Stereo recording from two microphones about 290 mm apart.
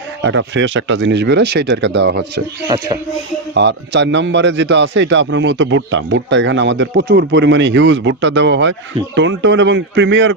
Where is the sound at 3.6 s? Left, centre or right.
Right.